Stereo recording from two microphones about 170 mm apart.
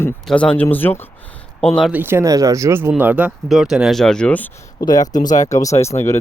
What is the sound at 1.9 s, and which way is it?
Speech, 15° right (ahead or behind).